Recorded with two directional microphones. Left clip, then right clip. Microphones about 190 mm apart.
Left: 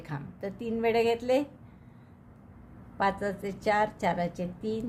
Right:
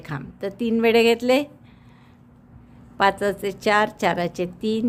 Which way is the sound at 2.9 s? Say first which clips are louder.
Right 9 dB; 45° right (ahead or behind).